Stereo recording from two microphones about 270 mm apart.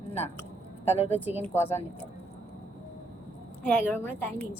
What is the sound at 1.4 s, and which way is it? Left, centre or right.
Speech, centre.